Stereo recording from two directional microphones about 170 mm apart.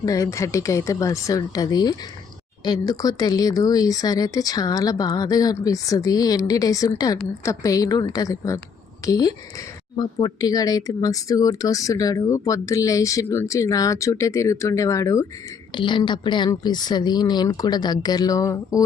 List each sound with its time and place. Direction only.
0.0 s speech: 20° left (ahead or behind)